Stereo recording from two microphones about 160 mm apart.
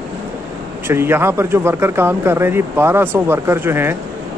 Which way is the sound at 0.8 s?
15° right (ahead or behind).